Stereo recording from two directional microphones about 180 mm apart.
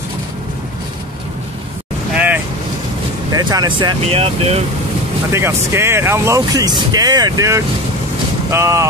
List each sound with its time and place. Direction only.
2.1 s vehicle: 10° right (ahead or behind)
3.3 s speech: 20° right (ahead or behind)
5.3 s speech: 15° right (ahead or behind)